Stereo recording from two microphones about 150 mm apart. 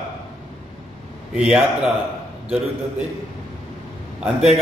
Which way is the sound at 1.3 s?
5° right (ahead or behind).